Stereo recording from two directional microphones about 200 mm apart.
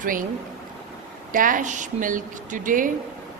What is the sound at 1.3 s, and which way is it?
Speech, 40° right (ahead or behind).